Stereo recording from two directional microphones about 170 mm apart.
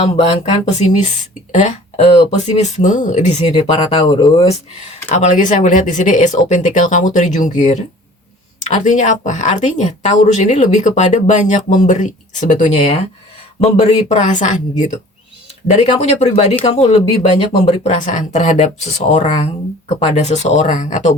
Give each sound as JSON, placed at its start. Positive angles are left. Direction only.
{"t": 0.0, "sound": "speech", "side_deg": 40}
{"t": 5.1, "sound": "speech", "side_deg": 45}